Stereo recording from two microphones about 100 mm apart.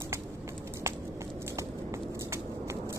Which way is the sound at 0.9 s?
25° right (ahead or behind).